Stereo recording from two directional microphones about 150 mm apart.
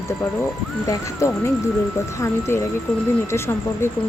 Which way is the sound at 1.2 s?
20° left (ahead or behind).